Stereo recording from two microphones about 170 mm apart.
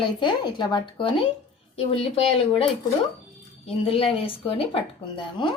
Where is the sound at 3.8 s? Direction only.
35° left (ahead or behind).